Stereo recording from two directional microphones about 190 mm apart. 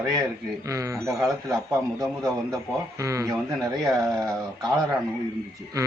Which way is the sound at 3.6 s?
Centre (ahead or behind).